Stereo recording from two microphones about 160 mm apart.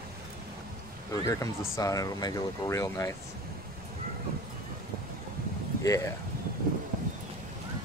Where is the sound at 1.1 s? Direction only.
20° left (ahead or behind).